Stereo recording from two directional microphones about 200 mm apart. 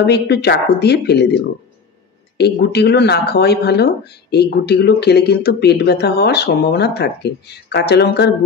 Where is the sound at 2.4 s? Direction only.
55° left (ahead or behind).